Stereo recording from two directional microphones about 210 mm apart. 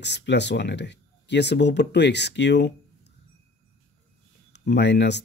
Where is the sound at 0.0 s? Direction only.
55° left (ahead or behind).